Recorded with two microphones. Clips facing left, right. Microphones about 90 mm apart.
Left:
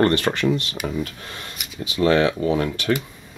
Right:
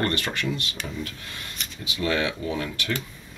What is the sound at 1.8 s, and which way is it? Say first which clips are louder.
Speech: left 8 dB; 35° left (ahead or behind).